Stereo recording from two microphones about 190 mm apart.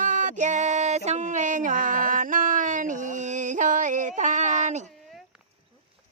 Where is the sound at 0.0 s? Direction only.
40° right (ahead or behind).